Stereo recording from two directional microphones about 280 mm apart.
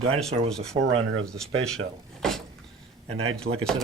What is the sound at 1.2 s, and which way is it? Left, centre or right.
Speech, centre.